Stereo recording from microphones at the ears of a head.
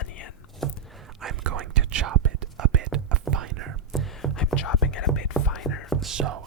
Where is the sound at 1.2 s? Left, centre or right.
Right.